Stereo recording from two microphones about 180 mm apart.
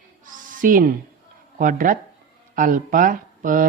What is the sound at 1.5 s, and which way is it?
Speech, 50° right (ahead or behind).